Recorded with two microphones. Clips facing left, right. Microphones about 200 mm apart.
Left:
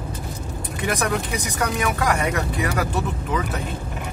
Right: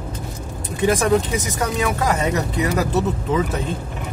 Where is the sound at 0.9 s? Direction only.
25° right (ahead or behind).